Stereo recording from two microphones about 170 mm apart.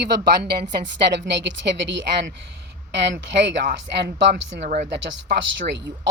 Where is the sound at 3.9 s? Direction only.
90° right.